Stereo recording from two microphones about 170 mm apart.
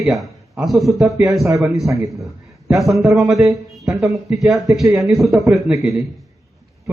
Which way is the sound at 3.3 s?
15° right (ahead or behind).